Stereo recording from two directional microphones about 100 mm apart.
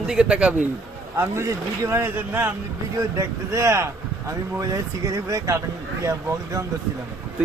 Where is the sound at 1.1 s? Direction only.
20° right (ahead or behind).